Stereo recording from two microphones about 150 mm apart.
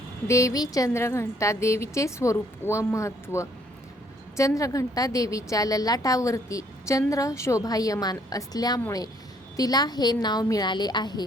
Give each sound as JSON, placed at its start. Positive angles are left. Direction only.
{"t": 0.3, "sound": "a woman's voice", "side_deg": 20}